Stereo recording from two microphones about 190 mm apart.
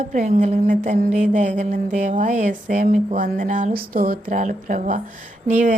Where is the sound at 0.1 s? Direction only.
40° right (ahead or behind).